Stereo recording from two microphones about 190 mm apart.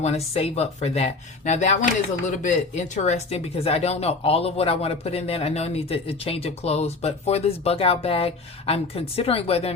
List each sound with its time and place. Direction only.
0.0 s speech: 35° left (ahead or behind)